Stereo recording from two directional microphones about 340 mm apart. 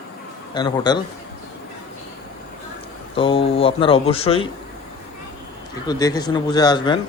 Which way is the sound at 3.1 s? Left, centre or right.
Centre.